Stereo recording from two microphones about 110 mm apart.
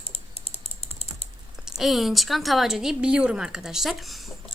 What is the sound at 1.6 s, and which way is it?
Speech, centre (ahead or behind).